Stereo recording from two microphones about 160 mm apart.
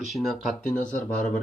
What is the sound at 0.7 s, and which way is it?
Speech, 55° left (ahead or behind).